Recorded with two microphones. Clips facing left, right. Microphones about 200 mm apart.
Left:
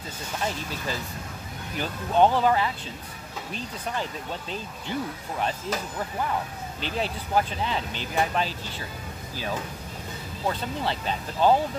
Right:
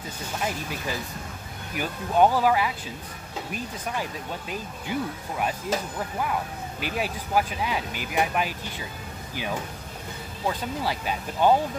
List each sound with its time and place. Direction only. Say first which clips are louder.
0.5 s speech: right 1 dB; 15° right (ahead or behind)
6.8 s speech: even; 10° right (ahead or behind)
10.8 s speech: even; 10° right (ahead or behind)